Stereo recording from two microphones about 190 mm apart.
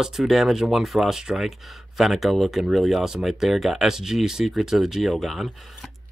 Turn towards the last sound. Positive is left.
turn(degrees=0)  # may be behind; listen again after turning